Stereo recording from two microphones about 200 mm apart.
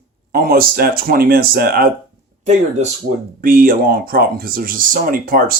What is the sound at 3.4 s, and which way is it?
Speech, 45° right (ahead or behind).